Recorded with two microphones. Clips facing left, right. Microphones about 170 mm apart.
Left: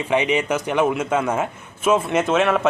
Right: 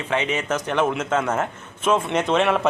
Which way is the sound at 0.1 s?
15° left (ahead or behind).